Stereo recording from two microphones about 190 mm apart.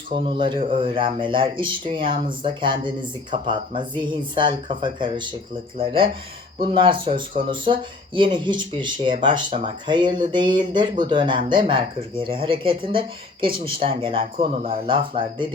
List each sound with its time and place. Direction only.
0.1 s speech: 25° right (ahead or behind)